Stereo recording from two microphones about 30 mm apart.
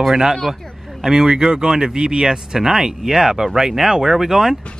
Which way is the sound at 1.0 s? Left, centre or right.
Centre.